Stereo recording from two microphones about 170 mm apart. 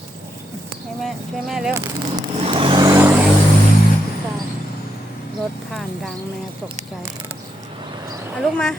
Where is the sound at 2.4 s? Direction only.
30° right (ahead or behind).